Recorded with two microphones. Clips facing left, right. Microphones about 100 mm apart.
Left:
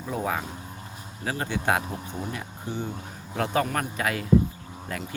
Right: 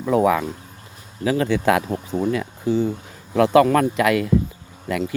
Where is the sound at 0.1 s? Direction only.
90° right.